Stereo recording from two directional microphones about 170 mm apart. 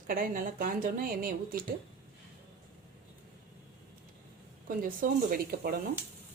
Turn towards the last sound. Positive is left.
turn(degrees=-60)  # may be behind; listen again after turning